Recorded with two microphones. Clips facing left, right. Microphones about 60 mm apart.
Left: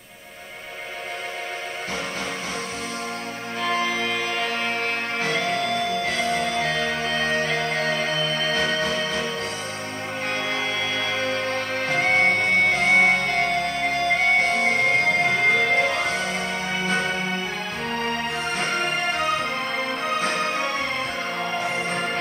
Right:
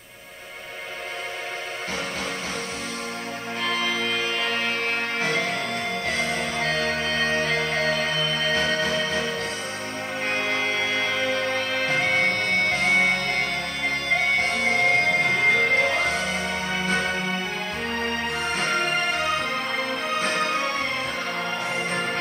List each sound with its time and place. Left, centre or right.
3.6 s music: left
6.6 s music: right
7.7 s music: left
10.3 s music: right
12.0 s music: left
14.5 s music: left
15.7 s music: centre
20.3 s music: centre